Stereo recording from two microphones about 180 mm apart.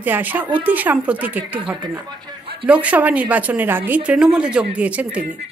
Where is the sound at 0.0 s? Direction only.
10° right (ahead or behind).